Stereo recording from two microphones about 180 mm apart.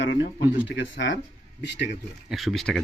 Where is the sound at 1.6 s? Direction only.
70° left (ahead or behind).